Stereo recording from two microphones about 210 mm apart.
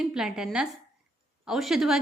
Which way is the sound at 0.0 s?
Centre (ahead or behind).